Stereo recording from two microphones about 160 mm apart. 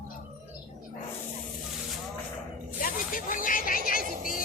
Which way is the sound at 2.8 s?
60° left (ahead or behind).